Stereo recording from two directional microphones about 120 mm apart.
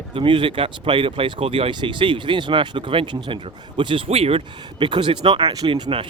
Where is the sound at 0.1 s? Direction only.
45° right (ahead or behind).